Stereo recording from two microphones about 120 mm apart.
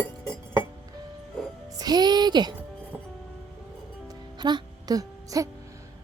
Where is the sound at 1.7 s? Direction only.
35° right (ahead or behind).